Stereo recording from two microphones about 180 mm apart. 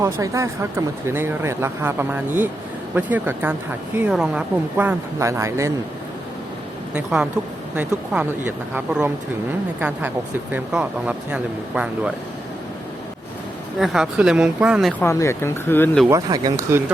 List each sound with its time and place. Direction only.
0.0 s speech: 15° right (ahead or behind)
6.9 s speech: 5° right (ahead or behind)
10.5 s speech: 5° right (ahead or behind)
13.7 s speech: centre (ahead or behind)
15.0 s speech: 15° left (ahead or behind)
16.0 s speech: 20° right (ahead or behind)